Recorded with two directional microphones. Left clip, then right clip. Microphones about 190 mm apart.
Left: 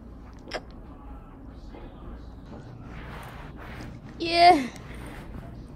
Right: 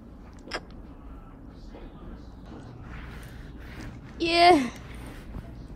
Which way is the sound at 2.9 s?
55° left (ahead or behind).